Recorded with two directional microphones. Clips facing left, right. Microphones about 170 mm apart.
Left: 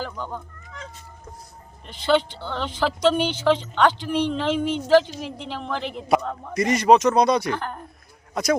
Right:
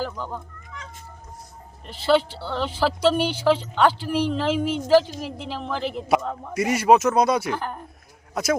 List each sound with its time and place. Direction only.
0.0 s a woman's voice: 5° right (ahead or behind)
1.9 s a woman's voice: 5° right (ahead or behind)